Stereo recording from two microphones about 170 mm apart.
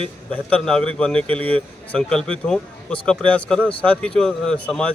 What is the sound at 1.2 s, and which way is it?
Speech, 35° right (ahead or behind).